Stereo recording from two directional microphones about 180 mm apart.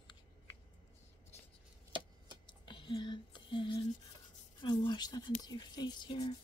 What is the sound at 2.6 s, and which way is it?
Whispering, 25° left (ahead or behind).